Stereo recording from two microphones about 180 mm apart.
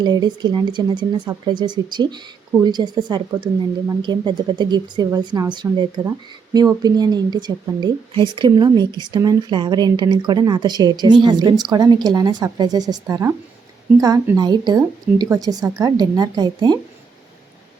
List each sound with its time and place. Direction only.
0.0 s speech: 25° right (ahead or behind)